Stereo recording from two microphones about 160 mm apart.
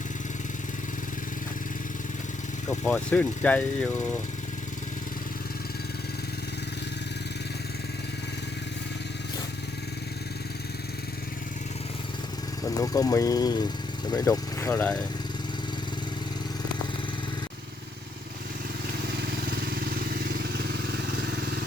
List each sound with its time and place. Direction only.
2.6 s speech: 10° left (ahead or behind)
12.6 s speech: 20° left (ahead or behind)
19.5 s vehicle: 85° right